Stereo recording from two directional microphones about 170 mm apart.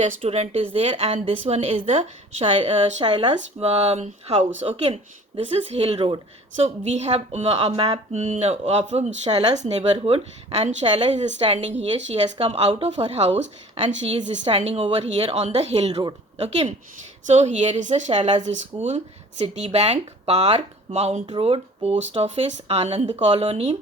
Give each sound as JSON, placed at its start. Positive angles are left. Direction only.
{"t": 0.0, "sound": "a woman's voice", "side_deg": -40}
{"t": 14.4, "sound": "a woman's voice", "side_deg": -40}